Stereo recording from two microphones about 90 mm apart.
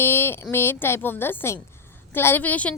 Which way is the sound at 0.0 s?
25° left (ahead or behind).